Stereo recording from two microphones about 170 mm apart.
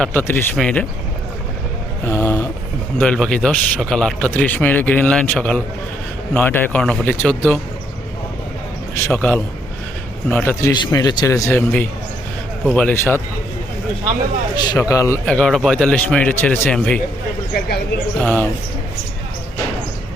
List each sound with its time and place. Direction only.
0.0 s a man's voice: 10° left (ahead or behind)
2.0 s speech: 20° left (ahead or behind)
3.0 s a man's voice: 5° left (ahead or behind)
9.0 s a man's voice: 15° left (ahead or behind)
10.7 s a man's voice: 25° left (ahead or behind)
14.5 s speech: 20° left (ahead or behind)
15.3 s a man's voice: 5° left (ahead or behind)
18.2 s a man's voice: 10° left (ahead or behind)